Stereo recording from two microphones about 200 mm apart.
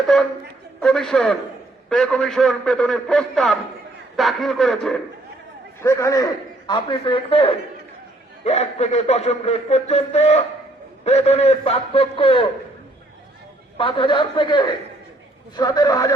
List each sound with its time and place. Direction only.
0.1 s a man's voice: centre (ahead or behind)
5.8 s a man's voice: 15° left (ahead or behind)
13.7 s a man's voice: 25° left (ahead or behind)